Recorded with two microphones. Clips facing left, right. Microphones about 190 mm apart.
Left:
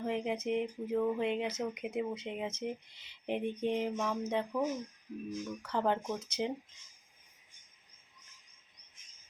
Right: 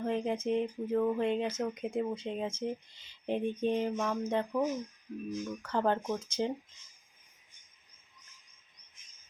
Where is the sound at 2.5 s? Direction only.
65° left (ahead or behind).